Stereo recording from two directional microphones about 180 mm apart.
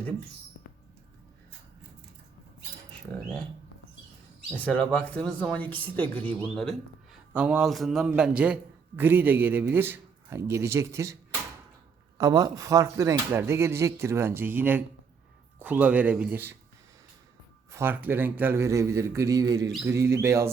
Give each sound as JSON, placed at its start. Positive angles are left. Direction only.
{"t": 4.5, "sound": "a man's voice", "side_deg": 5}
{"t": 17.7, "sound": "speech", "side_deg": -15}